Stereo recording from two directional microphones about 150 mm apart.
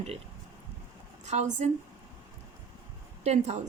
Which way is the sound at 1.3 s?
50° right (ahead or behind).